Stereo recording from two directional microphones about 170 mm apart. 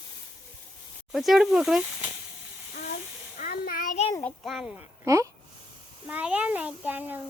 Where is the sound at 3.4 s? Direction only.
60° left (ahead or behind).